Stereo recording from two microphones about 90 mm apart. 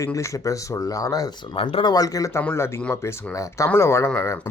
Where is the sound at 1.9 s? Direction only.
40° left (ahead or behind).